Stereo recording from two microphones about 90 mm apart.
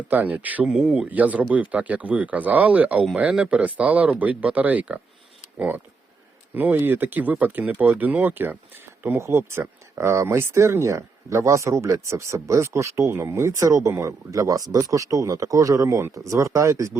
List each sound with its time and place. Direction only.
0.1 s speech: 20° right (ahead or behind)
1.0 s speech: 15° right (ahead or behind); by 17.0 s 35° right (ahead or behind)